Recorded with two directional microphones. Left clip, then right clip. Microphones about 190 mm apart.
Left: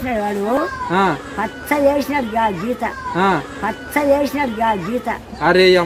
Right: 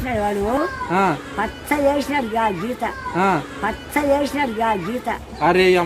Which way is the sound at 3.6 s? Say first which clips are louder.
Left 2 dB; 15° left (ahead or behind).